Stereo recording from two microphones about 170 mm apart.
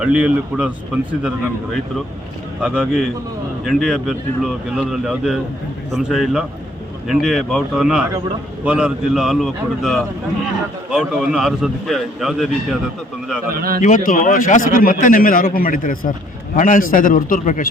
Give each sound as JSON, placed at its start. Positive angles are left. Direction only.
{"t": 0.0, "sound": "a man's voice", "side_deg": -5}
{"t": 2.6, "sound": "a man's voice", "side_deg": -5}
{"t": 13.5, "sound": "a man's voice", "side_deg": -60}
{"t": 13.8, "sound": "a man's voice", "side_deg": 50}